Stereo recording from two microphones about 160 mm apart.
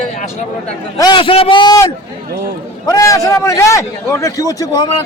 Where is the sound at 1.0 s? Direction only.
30° left (ahead or behind).